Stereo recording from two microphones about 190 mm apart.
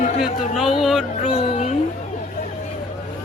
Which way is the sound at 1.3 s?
35° left (ahead or behind).